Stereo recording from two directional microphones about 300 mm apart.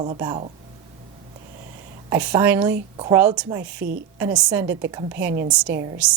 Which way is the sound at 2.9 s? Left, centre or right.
Centre.